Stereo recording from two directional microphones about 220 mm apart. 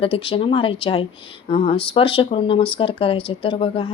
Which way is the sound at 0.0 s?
25° left (ahead or behind).